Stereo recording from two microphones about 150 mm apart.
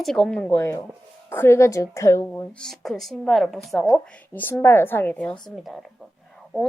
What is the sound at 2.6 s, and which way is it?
A woman's voice, centre (ahead or behind).